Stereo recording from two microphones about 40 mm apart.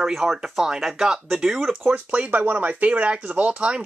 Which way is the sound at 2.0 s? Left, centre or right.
Right.